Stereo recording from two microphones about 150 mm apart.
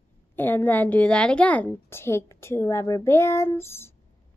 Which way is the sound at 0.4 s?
15° left (ahead or behind).